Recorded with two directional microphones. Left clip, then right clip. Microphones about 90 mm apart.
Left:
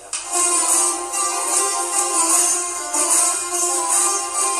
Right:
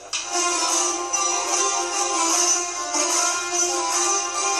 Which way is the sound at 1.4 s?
60° left (ahead or behind).